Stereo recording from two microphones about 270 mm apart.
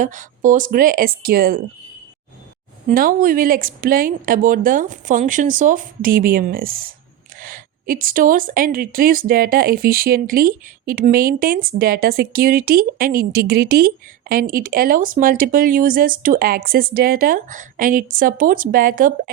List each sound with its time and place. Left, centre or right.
0.0 s a woman's voice: right
2.9 s a woman's voice: right